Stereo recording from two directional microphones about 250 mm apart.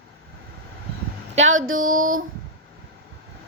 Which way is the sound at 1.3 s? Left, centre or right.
Right.